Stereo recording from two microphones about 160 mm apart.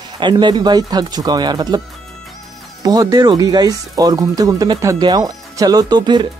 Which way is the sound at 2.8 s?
25° right (ahead or behind).